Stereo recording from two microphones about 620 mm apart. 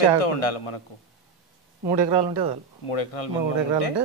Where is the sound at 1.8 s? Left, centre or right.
Right.